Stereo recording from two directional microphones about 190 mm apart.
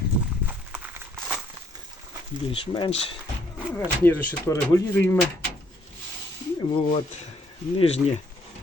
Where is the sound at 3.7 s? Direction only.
10° left (ahead or behind).